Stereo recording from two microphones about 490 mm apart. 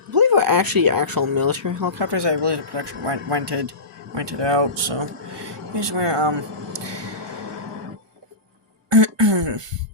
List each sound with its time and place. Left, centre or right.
0.1 s speech: right
8.9 s throat clearing: right